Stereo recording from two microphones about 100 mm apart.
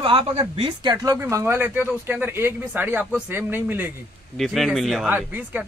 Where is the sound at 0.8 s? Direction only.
40° right (ahead or behind).